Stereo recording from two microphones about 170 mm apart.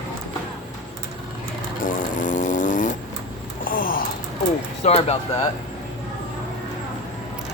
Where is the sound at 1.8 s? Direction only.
50° left (ahead or behind).